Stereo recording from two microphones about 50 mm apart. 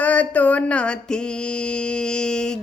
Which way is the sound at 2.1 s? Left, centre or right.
Centre.